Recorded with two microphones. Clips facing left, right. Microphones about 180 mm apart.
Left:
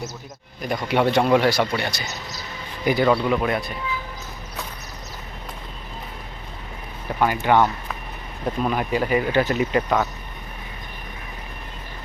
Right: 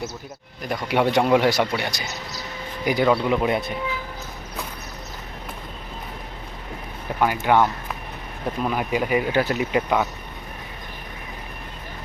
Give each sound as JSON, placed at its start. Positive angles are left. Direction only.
{"t": 0.6, "sound": "speech", "side_deg": 0}
{"t": 7.1, "sound": "a sound", "side_deg": -10}
{"t": 7.4, "sound": "speech", "side_deg": -5}